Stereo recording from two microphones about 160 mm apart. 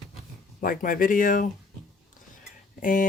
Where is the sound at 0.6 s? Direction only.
65° left (ahead or behind).